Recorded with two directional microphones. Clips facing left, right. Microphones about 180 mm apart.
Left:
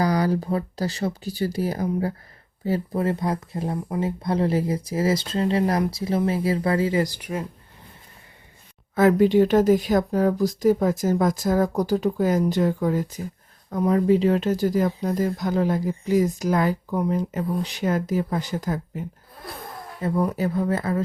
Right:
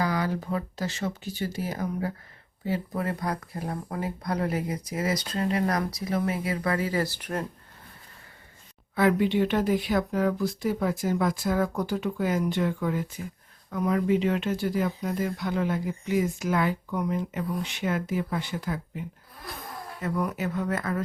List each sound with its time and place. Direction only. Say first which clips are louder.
0.0 s speech: left 6 dB; 40° left (ahead or behind); by 7.4 s 10° left (ahead or behind)
9.0 s speech: left 6 dB; 40° left (ahead or behind)
20.0 s speech: left 6 dB; 30° left (ahead or behind)